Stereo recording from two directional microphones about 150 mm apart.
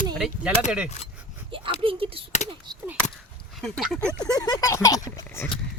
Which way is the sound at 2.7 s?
30° right (ahead or behind).